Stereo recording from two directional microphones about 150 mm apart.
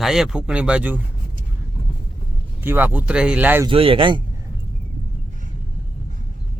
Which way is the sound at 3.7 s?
35° right (ahead or behind).